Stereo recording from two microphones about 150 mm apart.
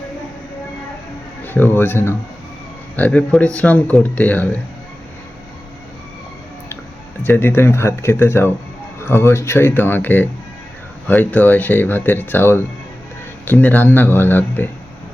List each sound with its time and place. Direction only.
1.5 s speech: 15° left (ahead or behind)
7.3 s speech: 15° left (ahead or behind)